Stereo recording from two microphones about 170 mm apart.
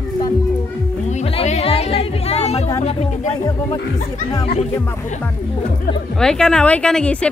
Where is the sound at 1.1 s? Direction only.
35° left (ahead or behind).